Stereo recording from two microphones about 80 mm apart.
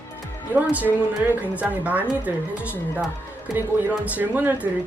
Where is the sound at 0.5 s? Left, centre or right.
Right.